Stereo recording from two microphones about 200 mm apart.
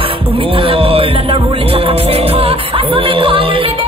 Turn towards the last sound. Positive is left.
turn(degrees=-25)  # may be behind; listen again after turning